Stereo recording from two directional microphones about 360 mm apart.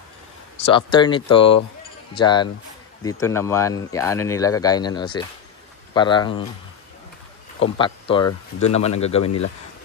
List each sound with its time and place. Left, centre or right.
0.6 s speech: centre
7.6 s speech: centre
9.2 s speech: left